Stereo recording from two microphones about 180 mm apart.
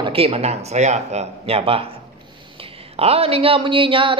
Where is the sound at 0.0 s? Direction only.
30° right (ahead or behind).